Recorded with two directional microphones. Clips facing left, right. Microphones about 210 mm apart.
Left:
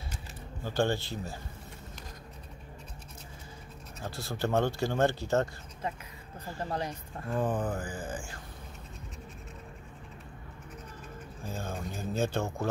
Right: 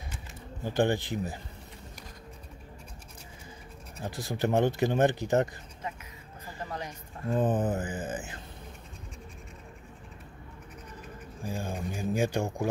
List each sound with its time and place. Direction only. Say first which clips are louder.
0.7 s speech: right 3 dB; 15° right (ahead or behind)
4.0 s speech: right 3 dB; 15° right (ahead or behind)
7.2 s a sound: right 4 dB; 20° right (ahead or behind)
11.4 s speech: right 3 dB; 15° right (ahead or behind)